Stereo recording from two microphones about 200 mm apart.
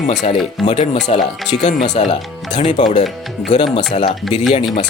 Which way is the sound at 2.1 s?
25° left (ahead or behind).